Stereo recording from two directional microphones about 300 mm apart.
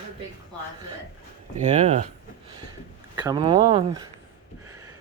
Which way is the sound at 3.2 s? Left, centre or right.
Centre.